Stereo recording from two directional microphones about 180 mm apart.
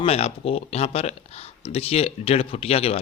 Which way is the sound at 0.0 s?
35° left (ahead or behind).